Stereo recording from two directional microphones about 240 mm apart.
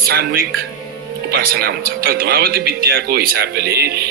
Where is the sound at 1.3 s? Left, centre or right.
Right.